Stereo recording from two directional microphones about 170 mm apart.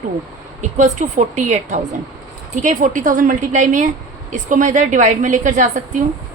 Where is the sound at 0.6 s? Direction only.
45° right (ahead or behind).